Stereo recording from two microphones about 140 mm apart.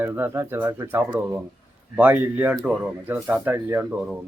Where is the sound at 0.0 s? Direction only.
15° right (ahead or behind).